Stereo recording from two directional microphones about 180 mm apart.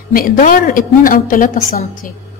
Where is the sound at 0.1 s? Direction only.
50° left (ahead or behind).